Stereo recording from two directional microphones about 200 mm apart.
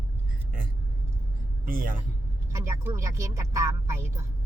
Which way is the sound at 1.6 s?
45° right (ahead or behind).